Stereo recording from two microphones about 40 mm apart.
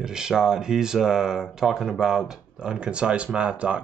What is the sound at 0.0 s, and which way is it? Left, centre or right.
Speech, centre.